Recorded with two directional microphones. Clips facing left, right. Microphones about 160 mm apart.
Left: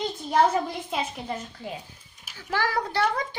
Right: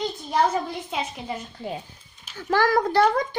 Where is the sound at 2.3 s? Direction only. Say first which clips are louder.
Right 6 dB; 45° right (ahead or behind).